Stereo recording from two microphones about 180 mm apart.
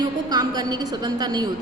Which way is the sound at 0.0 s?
20° right (ahead or behind).